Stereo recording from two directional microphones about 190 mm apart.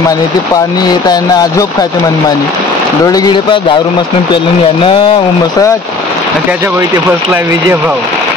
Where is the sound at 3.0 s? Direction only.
20° left (ahead or behind).